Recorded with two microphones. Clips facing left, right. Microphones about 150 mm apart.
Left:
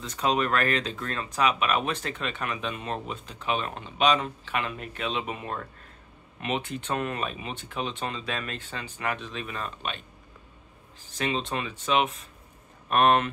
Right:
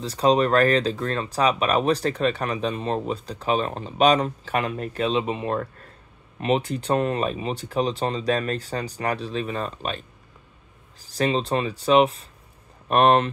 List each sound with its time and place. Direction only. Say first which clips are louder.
0.0 s speech: right 7 dB; 35° right (ahead or behind)